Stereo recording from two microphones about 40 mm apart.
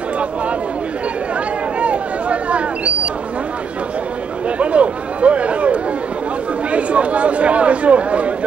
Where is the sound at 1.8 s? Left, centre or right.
Right.